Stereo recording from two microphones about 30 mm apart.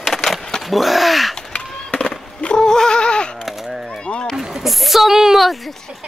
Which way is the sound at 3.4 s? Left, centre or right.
Centre.